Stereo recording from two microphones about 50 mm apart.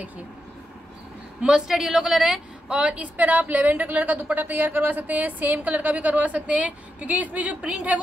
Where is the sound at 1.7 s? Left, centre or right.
Centre.